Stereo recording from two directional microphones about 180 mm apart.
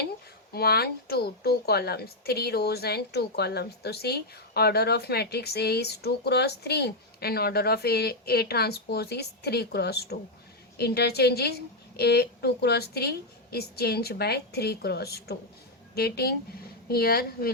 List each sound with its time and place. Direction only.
0.5 s a woman's voice: 60° left (ahead or behind)